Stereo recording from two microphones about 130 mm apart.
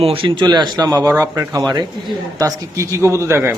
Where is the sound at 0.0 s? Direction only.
45° right (ahead or behind).